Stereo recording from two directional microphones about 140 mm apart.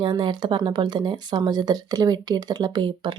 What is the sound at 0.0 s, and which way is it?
Speech, 35° right (ahead or behind).